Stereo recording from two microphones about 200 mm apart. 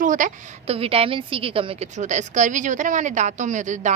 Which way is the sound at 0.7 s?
30° right (ahead or behind).